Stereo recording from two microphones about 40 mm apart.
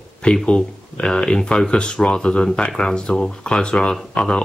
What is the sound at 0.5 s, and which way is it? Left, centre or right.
Speech, left.